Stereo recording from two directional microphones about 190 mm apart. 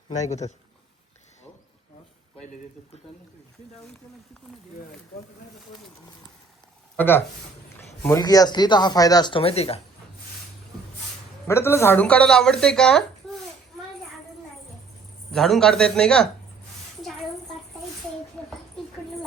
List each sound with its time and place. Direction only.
0.2 s a man's voice: 35° left (ahead or behind)
6.9 s speech: 10° left (ahead or behind); by 9.8 s 30° left (ahead or behind)
11.4 s speech: 15° left (ahead or behind)
15.3 s speech: centre (ahead or behind)
18.4 s a sound: 5° left (ahead or behind)